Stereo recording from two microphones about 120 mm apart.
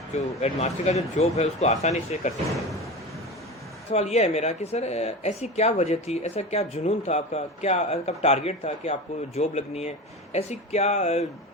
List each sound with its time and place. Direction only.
0.1 s speech: 65° left (ahead or behind)
3.8 s speech: 60° left (ahead or behind)